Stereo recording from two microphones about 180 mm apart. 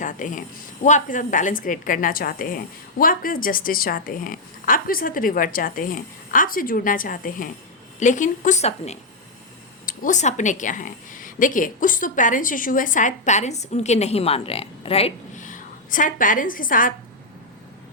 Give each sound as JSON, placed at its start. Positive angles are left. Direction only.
{"t": 0.0, "sound": "a woman's voice", "side_deg": 45}